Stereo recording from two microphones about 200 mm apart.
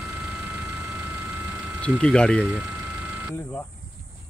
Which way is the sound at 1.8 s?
5° left (ahead or behind).